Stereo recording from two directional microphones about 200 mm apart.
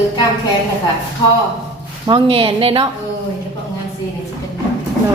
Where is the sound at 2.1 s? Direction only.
25° right (ahead or behind).